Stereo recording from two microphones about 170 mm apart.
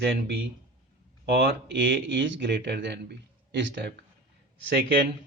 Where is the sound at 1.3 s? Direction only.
65° right (ahead or behind); by 3.9 s 90° right.